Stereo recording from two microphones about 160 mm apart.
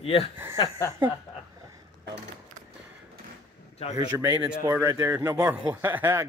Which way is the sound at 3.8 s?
40° left (ahead or behind).